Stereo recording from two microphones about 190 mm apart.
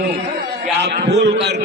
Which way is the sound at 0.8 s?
60° right (ahead or behind).